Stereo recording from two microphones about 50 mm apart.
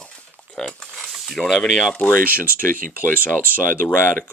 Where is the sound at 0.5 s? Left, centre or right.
Centre.